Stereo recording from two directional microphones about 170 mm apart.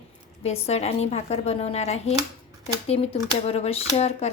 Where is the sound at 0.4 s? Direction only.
35° left (ahead or behind).